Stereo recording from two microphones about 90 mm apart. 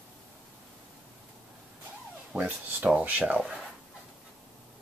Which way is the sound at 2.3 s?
20° right (ahead or behind).